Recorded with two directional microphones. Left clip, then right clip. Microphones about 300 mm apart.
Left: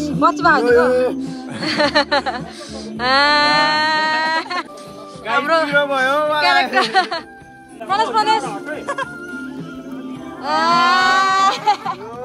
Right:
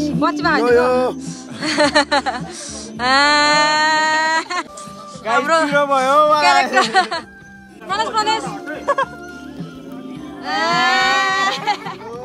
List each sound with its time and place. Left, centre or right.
0.2 s speech: centre
3.0 s a sound: centre
5.2 s speech: centre
8.8 s speech: centre
10.4 s music: centre